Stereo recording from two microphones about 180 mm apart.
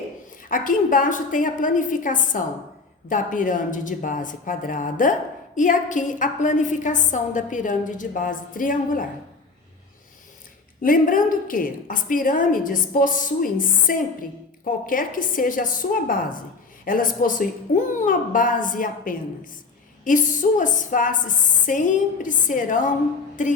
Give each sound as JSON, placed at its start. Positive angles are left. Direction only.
{"t": 0.4, "sound": "a woman's voice", "side_deg": 50}
{"t": 10.8, "sound": "a woman's voice", "side_deg": 50}